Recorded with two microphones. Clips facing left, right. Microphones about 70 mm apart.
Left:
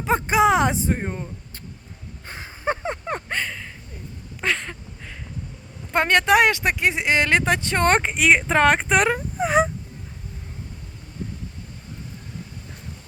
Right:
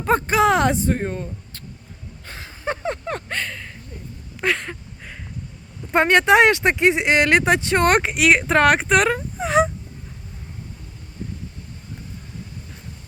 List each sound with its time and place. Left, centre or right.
0.3 s speech: centre
2.2 s a sound: left; by 5.1 s centre
5.9 s speech: centre
7.9 s speech: centre